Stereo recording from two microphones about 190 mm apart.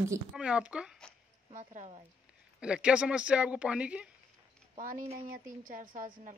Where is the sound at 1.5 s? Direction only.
40° right (ahead or behind).